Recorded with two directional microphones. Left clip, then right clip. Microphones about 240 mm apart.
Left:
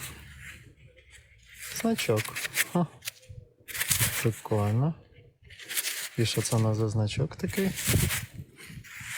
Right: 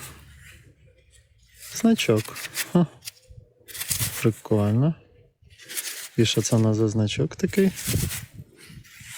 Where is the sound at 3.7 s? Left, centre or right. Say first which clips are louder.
Left 2 dB; left.